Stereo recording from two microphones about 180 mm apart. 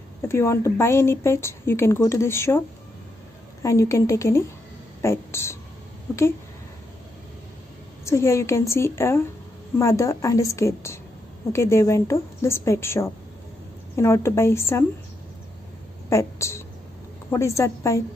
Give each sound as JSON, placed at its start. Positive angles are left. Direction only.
{"t": 0.2, "sound": "a woman's voice", "side_deg": 15}
{"t": 3.6, "sound": "a woman's voice", "side_deg": 15}
{"t": 8.0, "sound": "a woman's voice", "side_deg": 15}
{"t": 16.1, "sound": "a woman's voice", "side_deg": 15}